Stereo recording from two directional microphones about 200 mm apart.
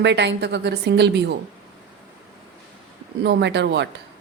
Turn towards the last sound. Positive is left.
turn(degrees=-60)  # may be behind; listen again after turning